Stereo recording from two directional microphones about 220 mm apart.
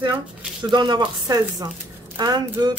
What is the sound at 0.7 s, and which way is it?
Speech, 20° right (ahead or behind).